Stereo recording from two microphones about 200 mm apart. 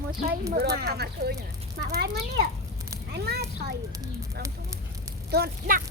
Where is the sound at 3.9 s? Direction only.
15° right (ahead or behind).